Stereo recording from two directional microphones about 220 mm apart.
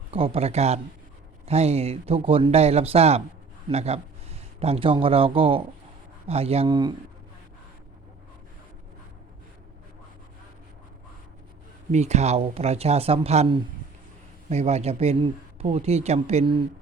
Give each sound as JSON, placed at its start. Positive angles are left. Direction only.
{"t": 0.1, "sound": "speech", "side_deg": -25}
{"t": 11.9, "sound": "speech", "side_deg": -30}